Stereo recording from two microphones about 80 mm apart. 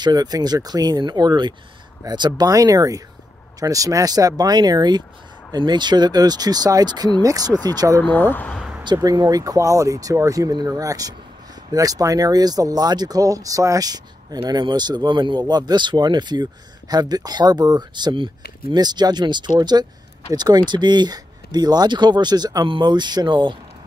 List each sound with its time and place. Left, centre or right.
0.0 s speech: right
8.0 s speech: left
8.8 s speech: right
10.5 s speech: right
22.7 s speech: right